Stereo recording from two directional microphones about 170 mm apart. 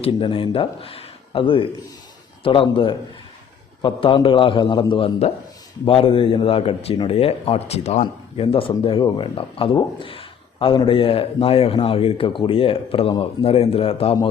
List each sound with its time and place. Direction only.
0.0 s a man's voice: 30° left (ahead or behind)